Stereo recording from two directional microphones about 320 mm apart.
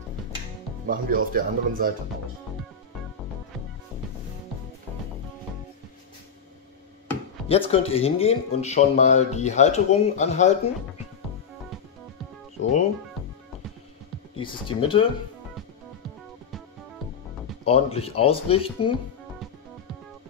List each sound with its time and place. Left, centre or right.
0.8 s speech: right
7.4 s speech: centre
14.3 s speech: centre
17.6 s speech: centre